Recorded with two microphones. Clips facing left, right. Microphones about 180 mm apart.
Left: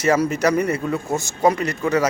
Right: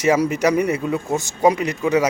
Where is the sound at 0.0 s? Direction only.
15° right (ahead or behind).